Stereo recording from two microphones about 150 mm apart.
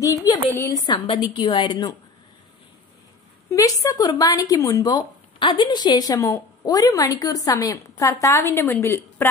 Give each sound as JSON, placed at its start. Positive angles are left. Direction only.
{"t": 0.0, "sound": "speech", "side_deg": 20}
{"t": 0.8, "sound": "a woman's voice", "side_deg": 35}
{"t": 3.5, "sound": "speech", "side_deg": 20}